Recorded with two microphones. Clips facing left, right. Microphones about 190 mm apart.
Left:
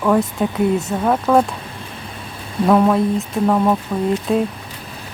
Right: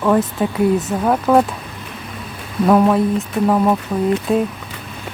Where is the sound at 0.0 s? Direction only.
Centre (ahead or behind).